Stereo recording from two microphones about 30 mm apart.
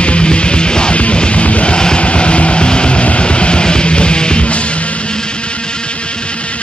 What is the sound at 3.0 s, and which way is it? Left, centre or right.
Music, left.